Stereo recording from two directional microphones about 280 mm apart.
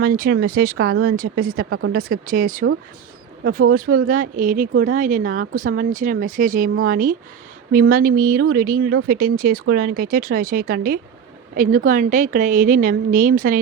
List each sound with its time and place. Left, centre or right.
0.0 s speech: right